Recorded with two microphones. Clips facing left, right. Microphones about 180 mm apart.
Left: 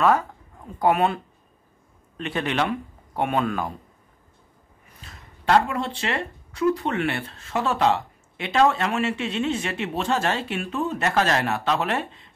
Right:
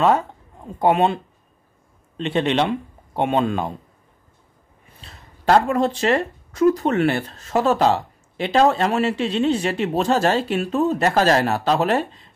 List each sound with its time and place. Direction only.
0.0 s speech: 25° right (ahead or behind)
5.0 s speech: 35° right (ahead or behind)